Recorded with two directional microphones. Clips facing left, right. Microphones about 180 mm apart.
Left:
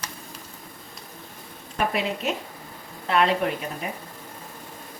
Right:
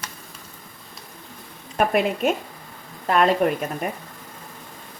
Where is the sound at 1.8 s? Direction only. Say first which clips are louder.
Right 6 dB; 50° right (ahead or behind).